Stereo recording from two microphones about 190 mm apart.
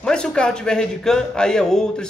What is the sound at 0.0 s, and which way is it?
A man's voice, 5° left (ahead or behind).